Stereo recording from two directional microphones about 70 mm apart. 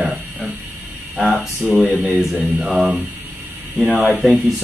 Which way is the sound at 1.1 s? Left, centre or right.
Centre.